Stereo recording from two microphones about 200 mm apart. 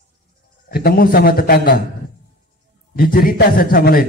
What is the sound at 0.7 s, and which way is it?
A man's voice, 50° left (ahead or behind).